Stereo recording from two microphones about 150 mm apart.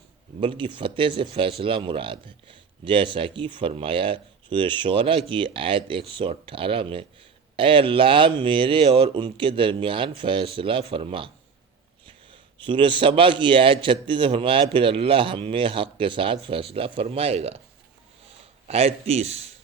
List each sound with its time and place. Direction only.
0.3 s speech: 35° right (ahead or behind)
12.6 s speech: 35° right (ahead or behind)
18.7 s a man's voice: 40° right (ahead or behind)